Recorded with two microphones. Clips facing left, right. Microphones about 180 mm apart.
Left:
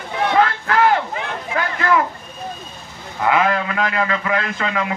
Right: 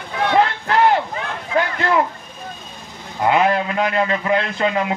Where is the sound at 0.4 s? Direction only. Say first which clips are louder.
Even; 20° right (ahead or behind).